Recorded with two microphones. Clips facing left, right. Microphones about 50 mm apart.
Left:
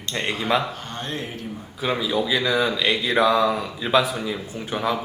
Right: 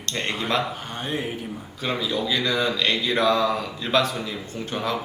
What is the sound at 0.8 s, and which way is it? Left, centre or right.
Speech, centre.